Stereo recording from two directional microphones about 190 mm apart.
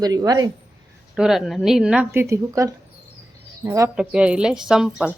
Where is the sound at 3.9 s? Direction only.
5° right (ahead or behind).